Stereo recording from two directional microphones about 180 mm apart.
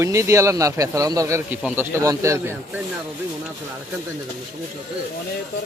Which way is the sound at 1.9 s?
15° right (ahead or behind).